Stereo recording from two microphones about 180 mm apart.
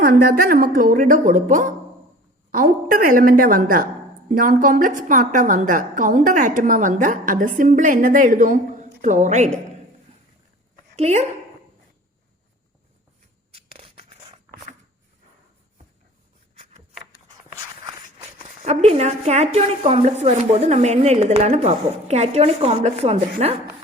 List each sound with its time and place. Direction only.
0.0 s a woman's voice: 55° right (ahead or behind)
10.9 s a woman's voice: 35° right (ahead or behind)
13.5 s a sound: 30° right (ahead or behind)
18.4 s a woman's voice: 35° right (ahead or behind)